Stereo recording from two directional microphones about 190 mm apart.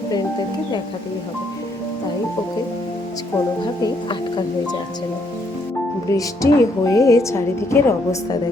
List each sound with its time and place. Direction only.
3.8 s speech: 20° left (ahead or behind)
6.1 s a woman's voice: 15° left (ahead or behind)